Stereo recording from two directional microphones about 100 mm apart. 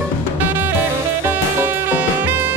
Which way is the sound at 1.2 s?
20° right (ahead or behind).